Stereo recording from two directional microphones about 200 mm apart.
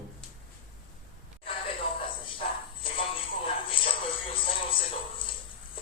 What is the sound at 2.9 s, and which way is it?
Music, 25° left (ahead or behind).